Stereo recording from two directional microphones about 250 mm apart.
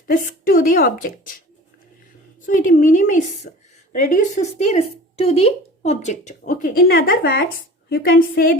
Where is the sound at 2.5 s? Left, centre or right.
Left.